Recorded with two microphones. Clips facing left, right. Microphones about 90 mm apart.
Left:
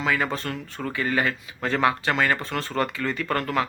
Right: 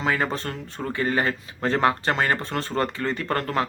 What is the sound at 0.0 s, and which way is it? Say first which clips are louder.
Speech: even; 35° right (ahead or behind).